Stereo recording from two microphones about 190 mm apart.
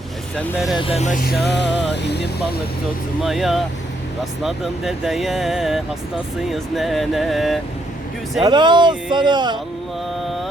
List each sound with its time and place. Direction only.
0.3 s speech: centre (ahead or behind)
0.8 s vehicle: 30° left (ahead or behind)
1.5 s music: 65° left (ahead or behind)
3.2 s speech: centre (ahead or behind)
8.4 s speech: 25° right (ahead or behind)